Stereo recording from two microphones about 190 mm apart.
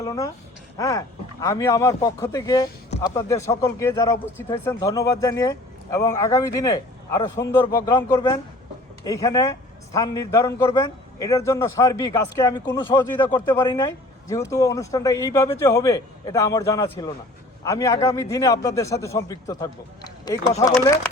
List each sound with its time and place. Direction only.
0.0 s a man's voice: 15° left (ahead or behind)